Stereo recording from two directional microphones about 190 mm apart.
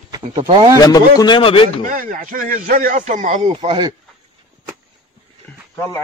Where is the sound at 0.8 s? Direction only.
20° left (ahead or behind).